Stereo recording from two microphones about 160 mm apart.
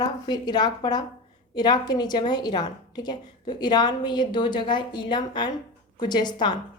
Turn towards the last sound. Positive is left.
turn(degrees=25)  # may be behind; listen again after turning